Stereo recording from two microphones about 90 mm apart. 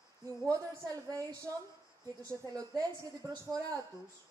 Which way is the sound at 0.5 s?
40° right (ahead or behind).